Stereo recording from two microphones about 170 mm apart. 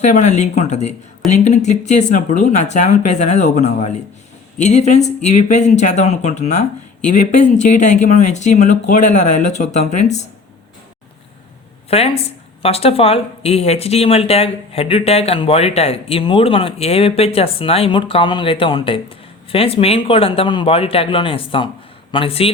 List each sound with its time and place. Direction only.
0.0 s speech: 45° left (ahead or behind)
11.9 s speech: 35° left (ahead or behind)